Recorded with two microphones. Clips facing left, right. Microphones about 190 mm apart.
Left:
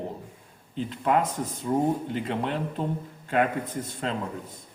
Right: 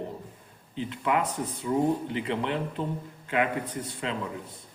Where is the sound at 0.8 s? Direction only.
40° left (ahead or behind).